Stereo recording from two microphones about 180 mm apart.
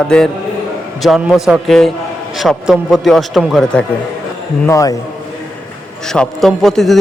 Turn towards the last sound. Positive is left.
turn(degrees=0)  # may be behind; listen again after turning